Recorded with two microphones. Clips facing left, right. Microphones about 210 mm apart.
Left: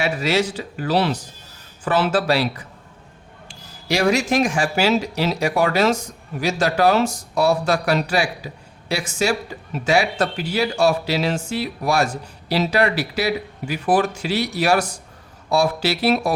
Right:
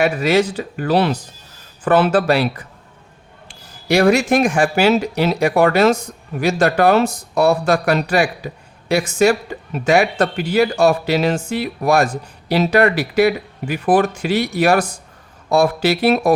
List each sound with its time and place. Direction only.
0.0 s speech: 55° right (ahead or behind)
3.8 s speech: 55° right (ahead or behind)